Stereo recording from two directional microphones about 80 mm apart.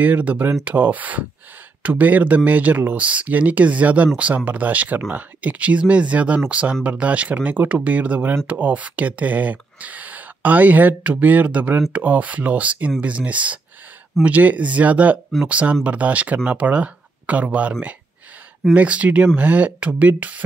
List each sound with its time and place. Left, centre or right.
0.0 s speech: centre
18.8 s speech: centre